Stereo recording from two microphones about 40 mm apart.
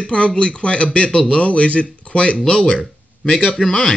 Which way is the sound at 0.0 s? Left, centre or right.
Left.